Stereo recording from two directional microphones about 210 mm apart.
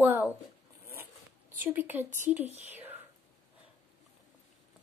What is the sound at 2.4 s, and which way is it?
Speech, 30° right (ahead or behind).